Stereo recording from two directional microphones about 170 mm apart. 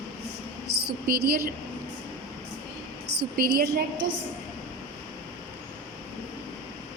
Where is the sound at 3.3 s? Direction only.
60° right (ahead or behind).